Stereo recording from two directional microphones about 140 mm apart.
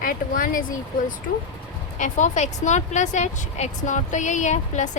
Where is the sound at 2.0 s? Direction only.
65° left (ahead or behind).